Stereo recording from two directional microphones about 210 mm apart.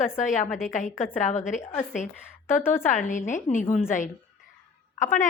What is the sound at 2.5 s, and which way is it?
Speech, 10° left (ahead or behind).